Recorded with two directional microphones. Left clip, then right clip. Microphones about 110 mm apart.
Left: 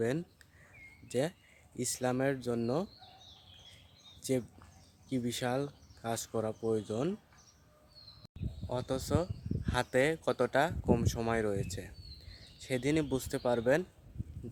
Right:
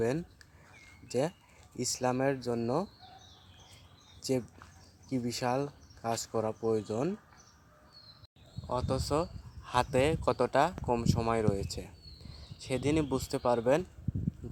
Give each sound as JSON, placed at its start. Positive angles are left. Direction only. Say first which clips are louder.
{"t": 0.0, "sound": "speech", "louder": "right 2 dB", "side_deg": 10}
{"t": 4.2, "sound": "speech", "louder": "right 1 dB", "side_deg": 15}
{"t": 8.7, "sound": "speech", "louder": "right 3 dB", "side_deg": 10}